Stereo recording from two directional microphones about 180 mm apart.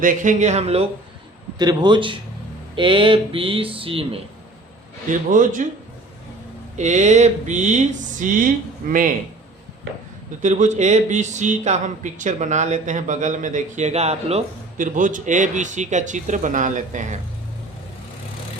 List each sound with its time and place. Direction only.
0.0 s speech: 45° right (ahead or behind)
1.5 s speech: 25° right (ahead or behind)
5.3 s speech: 45° right (ahead or behind)
6.7 s speech: 40° right (ahead or behind)
10.4 s speech: 40° right (ahead or behind)